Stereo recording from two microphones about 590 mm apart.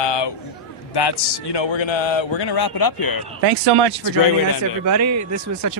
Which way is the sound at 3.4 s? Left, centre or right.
Right.